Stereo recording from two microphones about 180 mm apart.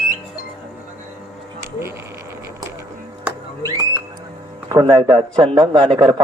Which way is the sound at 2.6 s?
15° right (ahead or behind).